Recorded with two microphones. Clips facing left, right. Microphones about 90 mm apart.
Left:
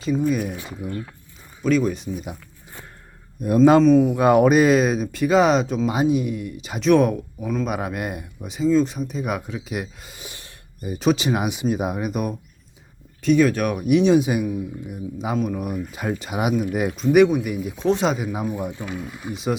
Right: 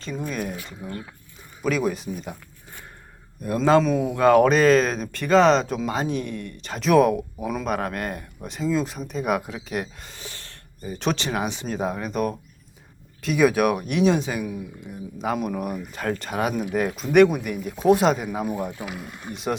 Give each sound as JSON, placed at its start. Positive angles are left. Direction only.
{"t": 0.0, "sound": "speech", "side_deg": 5}
{"t": 1.6, "sound": "speech", "side_deg": -5}
{"t": 2.1, "sound": "speech", "side_deg": 10}
{"t": 3.4, "sound": "speech", "side_deg": 20}
{"t": 3.8, "sound": "speech", "side_deg": -10}
{"t": 4.1, "sound": "speech", "side_deg": 15}
{"t": 13.2, "sound": "speech", "side_deg": -5}
{"t": 16.9, "sound": "speech", "side_deg": 0}